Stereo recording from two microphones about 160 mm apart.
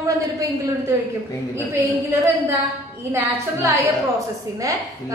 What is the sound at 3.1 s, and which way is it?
Speech, 20° right (ahead or behind).